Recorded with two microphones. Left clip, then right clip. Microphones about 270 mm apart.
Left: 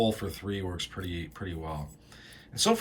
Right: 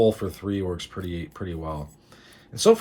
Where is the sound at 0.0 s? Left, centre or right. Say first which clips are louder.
Right 8 dB; centre.